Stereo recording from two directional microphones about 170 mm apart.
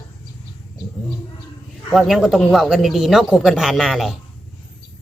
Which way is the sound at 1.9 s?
Centre (ahead or behind).